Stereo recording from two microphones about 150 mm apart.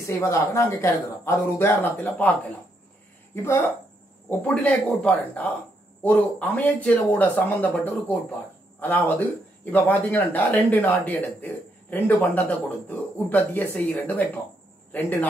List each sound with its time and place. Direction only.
0.0 s speech: 20° left (ahead or behind)
3.4 s speech: 15° left (ahead or behind)